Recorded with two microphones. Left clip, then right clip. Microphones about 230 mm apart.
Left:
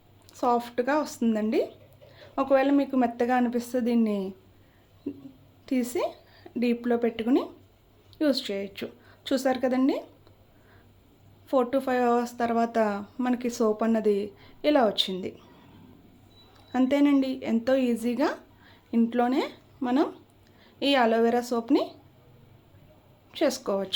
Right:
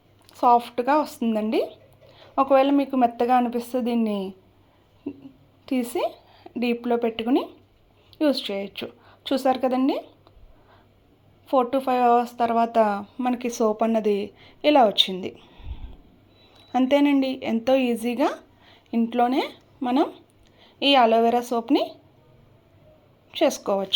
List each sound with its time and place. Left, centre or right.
0.3 s a woman's voice: centre
5.6 s a woman's voice: centre
11.4 s a woman's voice: centre
16.7 s a woman's voice: centre
23.6 s a woman's voice: centre